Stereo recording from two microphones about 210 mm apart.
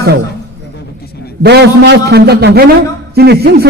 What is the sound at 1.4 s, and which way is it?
A man's voice, 50° right (ahead or behind).